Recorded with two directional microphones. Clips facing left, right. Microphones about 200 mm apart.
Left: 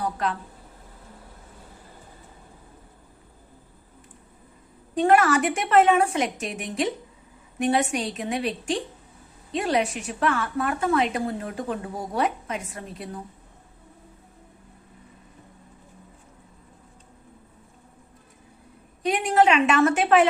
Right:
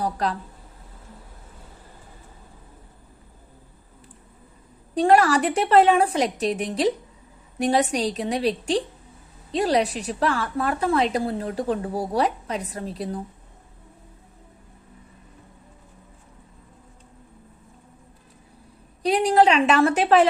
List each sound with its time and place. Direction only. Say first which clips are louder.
0.0 s speech: right 2 dB; 35° right (ahead or behind)
4.9 s a woman's voice: right 1 dB; 35° right (ahead or behind)
19.0 s a woman's voice: right 2 dB; 35° right (ahead or behind)